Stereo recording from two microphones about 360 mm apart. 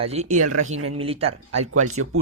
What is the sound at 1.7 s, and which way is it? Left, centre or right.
Speech, right.